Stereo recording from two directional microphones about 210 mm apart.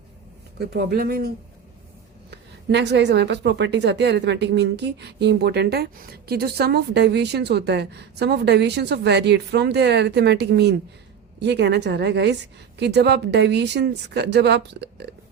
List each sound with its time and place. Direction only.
0.6 s a woman's voice: 50° right (ahead or behind)
2.3 s a woman's voice: 55° right (ahead or behind)